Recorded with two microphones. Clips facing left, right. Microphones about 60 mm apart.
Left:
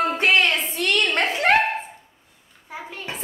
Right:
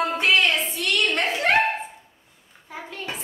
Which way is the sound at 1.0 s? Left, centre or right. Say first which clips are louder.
Left 1 dB; left.